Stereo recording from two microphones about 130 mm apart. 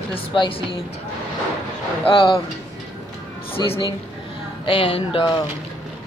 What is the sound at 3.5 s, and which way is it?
Speech, 45° left (ahead or behind).